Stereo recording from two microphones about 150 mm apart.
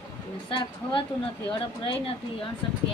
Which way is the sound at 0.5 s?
35° left (ahead or behind).